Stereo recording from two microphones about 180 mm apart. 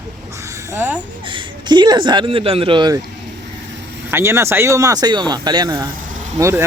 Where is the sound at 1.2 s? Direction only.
30° right (ahead or behind).